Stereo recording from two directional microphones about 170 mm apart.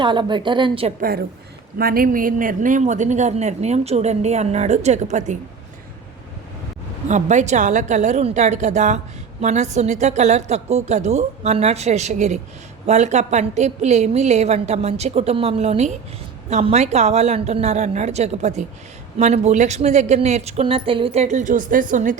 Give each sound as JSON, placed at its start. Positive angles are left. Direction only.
{"t": 0.0, "sound": "a woman's voice", "side_deg": -25}
{"t": 1.8, "sound": "a woman's voice", "side_deg": -60}
{"t": 7.1, "sound": "a woman's voice", "side_deg": -45}